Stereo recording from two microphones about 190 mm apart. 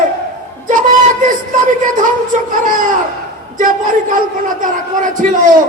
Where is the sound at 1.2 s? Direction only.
45° right (ahead or behind).